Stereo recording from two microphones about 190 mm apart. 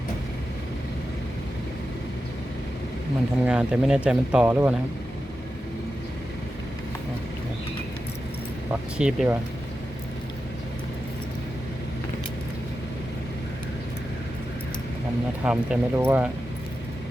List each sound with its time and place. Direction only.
3.4 s speech: 5° right (ahead or behind)
8.7 s speech: 5° right (ahead or behind)
15.4 s speech: 5° right (ahead or behind)